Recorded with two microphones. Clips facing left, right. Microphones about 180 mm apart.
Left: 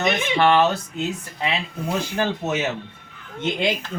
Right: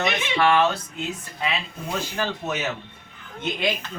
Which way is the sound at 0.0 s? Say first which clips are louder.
Left 3 dB; 45° left (ahead or behind).